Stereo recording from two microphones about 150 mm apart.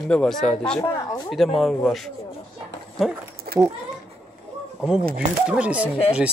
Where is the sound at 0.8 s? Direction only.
20° left (ahead or behind).